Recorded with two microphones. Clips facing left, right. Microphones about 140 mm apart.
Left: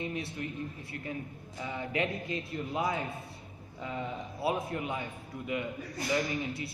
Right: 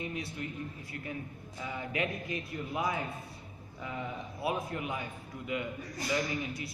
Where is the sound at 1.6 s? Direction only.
25° left (ahead or behind).